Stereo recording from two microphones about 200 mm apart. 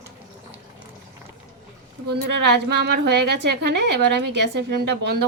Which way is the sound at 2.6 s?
55° right (ahead or behind).